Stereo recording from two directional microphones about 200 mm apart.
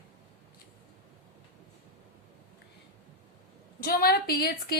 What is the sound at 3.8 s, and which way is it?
Speech, 50° left (ahead or behind).